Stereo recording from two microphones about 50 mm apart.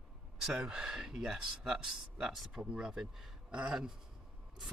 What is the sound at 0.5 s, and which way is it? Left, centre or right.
Speech, centre.